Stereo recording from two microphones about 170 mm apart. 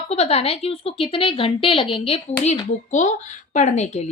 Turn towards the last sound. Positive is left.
turn(degrees=40)  # may be behind; listen again after turning